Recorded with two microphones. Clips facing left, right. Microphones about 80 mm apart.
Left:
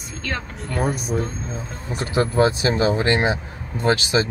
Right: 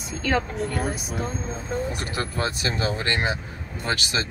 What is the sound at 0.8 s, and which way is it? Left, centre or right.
Speech, left.